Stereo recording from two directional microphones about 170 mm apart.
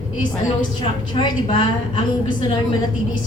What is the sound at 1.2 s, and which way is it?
A woman's voice, 30° left (ahead or behind).